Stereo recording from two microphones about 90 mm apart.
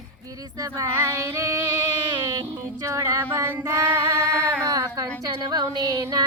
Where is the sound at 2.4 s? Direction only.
35° right (ahead or behind).